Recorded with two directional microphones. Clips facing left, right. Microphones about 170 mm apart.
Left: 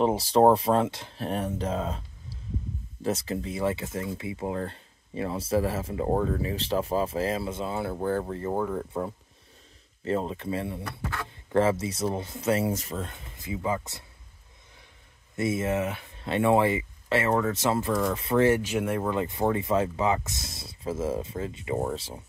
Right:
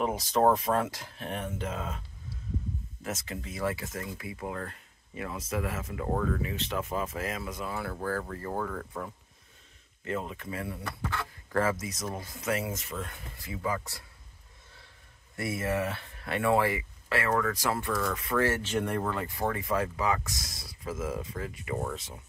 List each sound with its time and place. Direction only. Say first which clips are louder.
0.0 s speech: left 5 dB; 30° left (ahead or behind)
15.3 s speech: left 4 dB; 20° left (ahead or behind)
18.5 s speech: left 5 dB; 10° left (ahead or behind)
19.0 s speech: left 5 dB; 20° left (ahead or behind)